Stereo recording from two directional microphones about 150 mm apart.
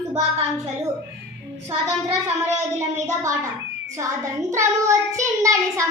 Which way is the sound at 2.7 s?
50° right (ahead or behind).